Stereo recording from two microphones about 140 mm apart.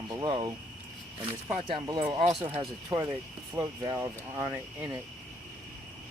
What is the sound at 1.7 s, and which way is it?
Speech, 35° right (ahead or behind).